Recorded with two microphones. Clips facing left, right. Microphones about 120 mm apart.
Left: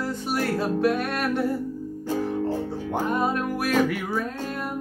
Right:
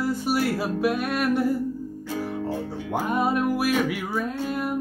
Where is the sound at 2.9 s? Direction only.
5° right (ahead or behind).